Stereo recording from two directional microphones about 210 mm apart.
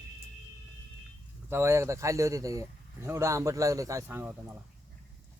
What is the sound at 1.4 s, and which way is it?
Speech, 10° right (ahead or behind).